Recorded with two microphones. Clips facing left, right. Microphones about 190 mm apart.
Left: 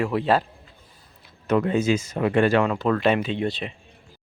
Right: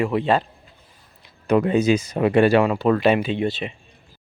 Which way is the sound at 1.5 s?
15° right (ahead or behind).